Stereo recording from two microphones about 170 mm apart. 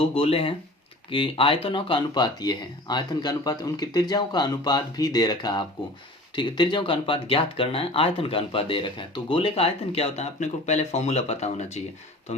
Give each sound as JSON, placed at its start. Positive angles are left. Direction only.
{"t": 0.1, "sound": "speech", "side_deg": 35}